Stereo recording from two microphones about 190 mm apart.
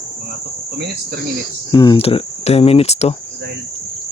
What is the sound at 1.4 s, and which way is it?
Speech, 25° left (ahead or behind).